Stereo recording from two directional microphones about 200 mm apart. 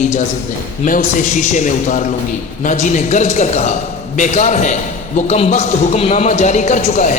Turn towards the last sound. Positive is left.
turn(degrees=35)  # may be behind; listen again after turning